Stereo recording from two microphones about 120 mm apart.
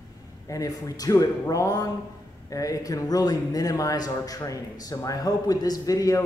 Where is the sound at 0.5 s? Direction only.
30° left (ahead or behind).